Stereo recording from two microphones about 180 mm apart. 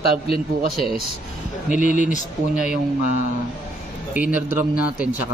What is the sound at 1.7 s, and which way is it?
Speech, 45° left (ahead or behind).